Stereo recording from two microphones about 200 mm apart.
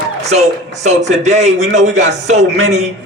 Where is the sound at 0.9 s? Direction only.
35° right (ahead or behind).